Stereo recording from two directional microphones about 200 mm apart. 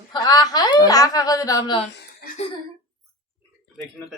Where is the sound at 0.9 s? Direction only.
20° left (ahead or behind).